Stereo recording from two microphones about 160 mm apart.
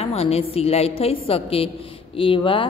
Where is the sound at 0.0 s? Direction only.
40° left (ahead or behind).